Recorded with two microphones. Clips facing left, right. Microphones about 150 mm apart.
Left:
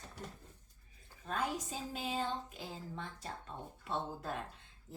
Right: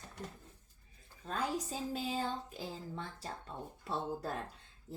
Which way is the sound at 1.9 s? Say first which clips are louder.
Even; 35° right (ahead or behind).